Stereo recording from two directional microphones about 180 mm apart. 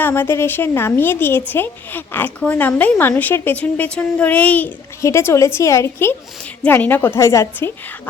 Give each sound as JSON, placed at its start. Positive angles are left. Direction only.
{"t": 0.0, "sound": "a woman's voice", "side_deg": 10}